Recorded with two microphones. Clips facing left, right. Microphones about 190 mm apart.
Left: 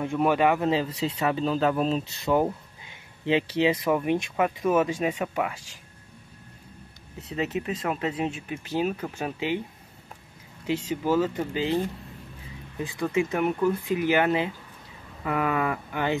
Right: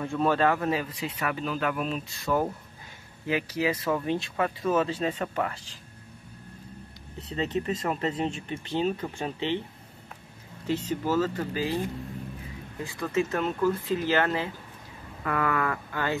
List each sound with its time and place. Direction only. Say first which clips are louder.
0.0 s speech: left 2 dB; 15° left (ahead or behind); by 2.2 s 30° left (ahead or behind)
3.3 s speech: left 4 dB; 25° left (ahead or behind)
3.7 s speech: left 3 dB; 15° left (ahead or behind)
7.2 s speech: even; 5° left (ahead or behind)
10.7 s speech: left 2 dB; 10° left (ahead or behind)